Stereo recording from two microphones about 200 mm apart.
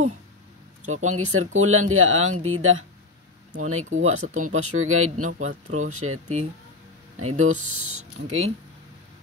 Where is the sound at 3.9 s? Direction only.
90° right.